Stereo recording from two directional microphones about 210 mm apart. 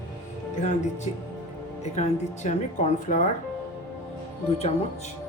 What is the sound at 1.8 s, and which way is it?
Speech, 35° left (ahead or behind).